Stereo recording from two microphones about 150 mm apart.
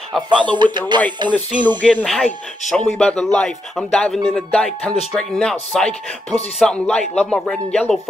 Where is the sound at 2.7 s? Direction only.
5° left (ahead or behind).